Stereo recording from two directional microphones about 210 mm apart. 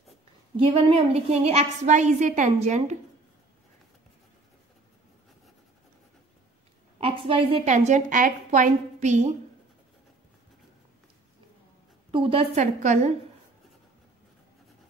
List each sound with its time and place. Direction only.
0.7 s a woman's voice: 25° right (ahead or behind)
7.0 s a woman's voice: 25° right (ahead or behind)
12.1 s a woman's voice: 25° right (ahead or behind)